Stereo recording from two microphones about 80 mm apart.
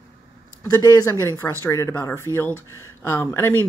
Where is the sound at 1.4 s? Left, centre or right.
Left.